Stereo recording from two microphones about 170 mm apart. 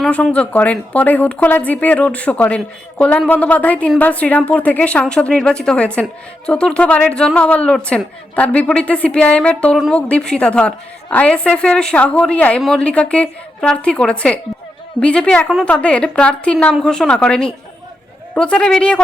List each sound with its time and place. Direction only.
0.0 s a woman's voice: 5° left (ahead or behind)